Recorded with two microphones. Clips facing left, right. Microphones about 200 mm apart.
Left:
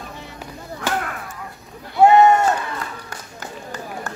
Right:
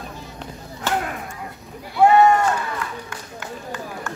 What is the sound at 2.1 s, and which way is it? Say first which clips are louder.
Run: left 1 dB; 25° left (ahead or behind).